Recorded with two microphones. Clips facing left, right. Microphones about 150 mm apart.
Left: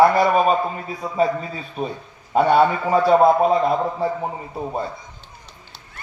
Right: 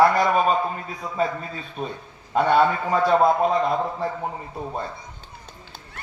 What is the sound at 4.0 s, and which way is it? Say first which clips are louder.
Speech: left 4 dB; 15° left (ahead or behind).